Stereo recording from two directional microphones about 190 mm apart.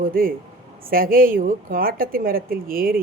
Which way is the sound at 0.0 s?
50° right (ahead or behind).